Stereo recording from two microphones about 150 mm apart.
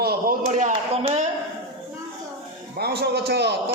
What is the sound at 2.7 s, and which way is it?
Speech, 90° right.